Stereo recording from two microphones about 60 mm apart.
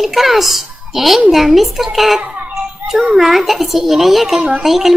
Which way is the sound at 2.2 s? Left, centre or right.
Right.